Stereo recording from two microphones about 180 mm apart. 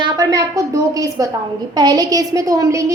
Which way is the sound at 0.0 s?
20° right (ahead or behind).